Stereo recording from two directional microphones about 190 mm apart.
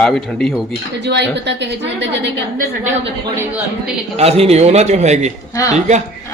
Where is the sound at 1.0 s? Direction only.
65° right (ahead or behind).